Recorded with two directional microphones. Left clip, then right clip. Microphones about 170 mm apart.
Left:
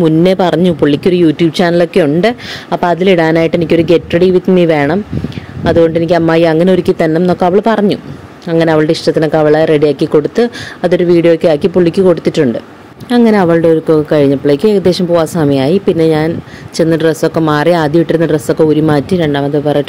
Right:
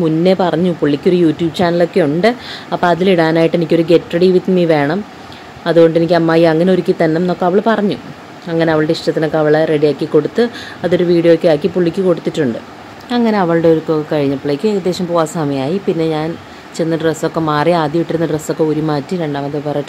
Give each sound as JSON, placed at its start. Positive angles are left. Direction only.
{"t": 0.0, "sound": "speech", "side_deg": 40}